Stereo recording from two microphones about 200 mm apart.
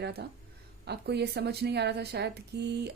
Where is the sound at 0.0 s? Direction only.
55° right (ahead or behind).